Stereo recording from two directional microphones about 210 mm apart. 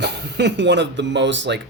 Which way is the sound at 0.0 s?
55° right (ahead or behind).